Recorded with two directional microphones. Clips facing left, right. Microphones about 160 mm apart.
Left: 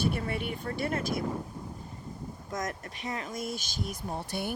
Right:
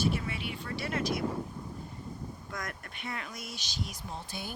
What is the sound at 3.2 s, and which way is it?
Speech, 45° left (ahead or behind).